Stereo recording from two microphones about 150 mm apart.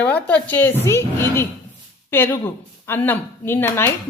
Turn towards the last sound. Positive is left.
turn(degrees=15)  # may be behind; listen again after turning